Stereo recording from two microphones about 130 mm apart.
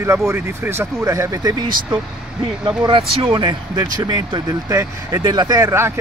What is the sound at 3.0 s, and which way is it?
Speech, 45° right (ahead or behind).